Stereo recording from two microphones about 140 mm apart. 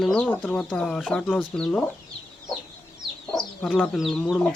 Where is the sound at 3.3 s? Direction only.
Centre (ahead or behind).